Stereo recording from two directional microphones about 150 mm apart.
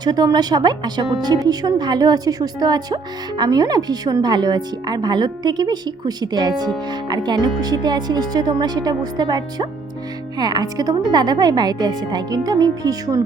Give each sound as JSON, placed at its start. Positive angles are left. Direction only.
{"t": 0.0, "sound": "speech", "side_deg": -25}